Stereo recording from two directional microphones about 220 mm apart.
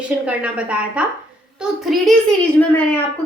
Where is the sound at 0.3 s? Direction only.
5° right (ahead or behind).